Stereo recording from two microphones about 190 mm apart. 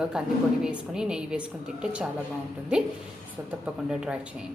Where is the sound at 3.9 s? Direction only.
5° right (ahead or behind).